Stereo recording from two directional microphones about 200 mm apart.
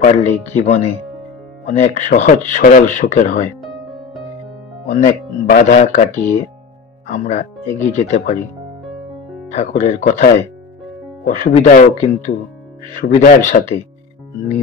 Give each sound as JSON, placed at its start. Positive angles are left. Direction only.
{"t": 0.0, "sound": "speech", "side_deg": 35}
{"t": 4.8, "sound": "speech", "side_deg": 40}
{"t": 9.5, "sound": "speech", "side_deg": 35}